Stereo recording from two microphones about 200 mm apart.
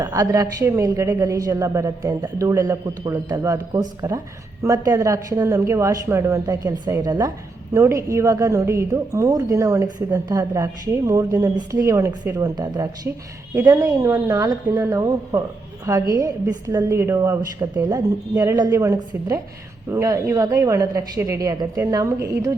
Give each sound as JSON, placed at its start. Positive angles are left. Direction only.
{"t": 0.0, "sound": "a woman's voice", "side_deg": -15}